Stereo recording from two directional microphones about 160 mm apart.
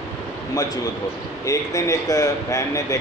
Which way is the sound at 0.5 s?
25° left (ahead or behind).